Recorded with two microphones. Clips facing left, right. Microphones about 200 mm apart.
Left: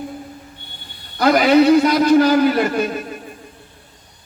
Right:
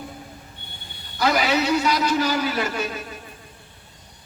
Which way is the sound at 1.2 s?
55° left (ahead or behind).